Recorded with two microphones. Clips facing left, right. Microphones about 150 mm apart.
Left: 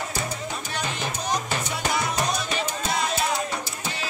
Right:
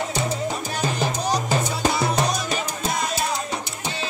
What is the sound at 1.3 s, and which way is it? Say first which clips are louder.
Music: right 2 dB; 35° right (ahead or behind).